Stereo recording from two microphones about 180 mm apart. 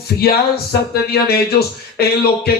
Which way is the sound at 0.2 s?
60° left (ahead or behind).